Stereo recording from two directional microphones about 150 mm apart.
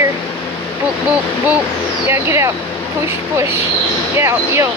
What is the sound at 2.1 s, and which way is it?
Speech, 15° right (ahead or behind).